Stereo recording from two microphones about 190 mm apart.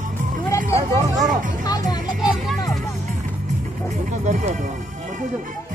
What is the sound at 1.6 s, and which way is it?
Music, 20° left (ahead or behind).